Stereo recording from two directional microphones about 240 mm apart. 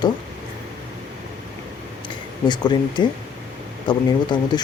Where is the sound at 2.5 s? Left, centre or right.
Centre.